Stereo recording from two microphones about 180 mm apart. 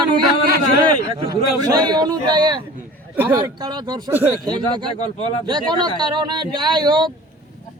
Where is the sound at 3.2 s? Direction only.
10° right (ahead or behind).